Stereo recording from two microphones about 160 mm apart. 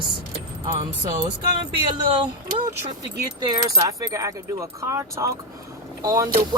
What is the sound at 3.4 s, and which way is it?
Speech, 25° right (ahead or behind).